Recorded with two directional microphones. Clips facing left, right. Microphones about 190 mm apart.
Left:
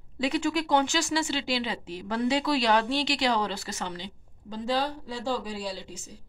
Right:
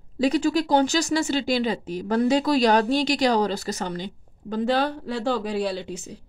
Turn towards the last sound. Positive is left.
turn(degrees=-65)  # may be behind; listen again after turning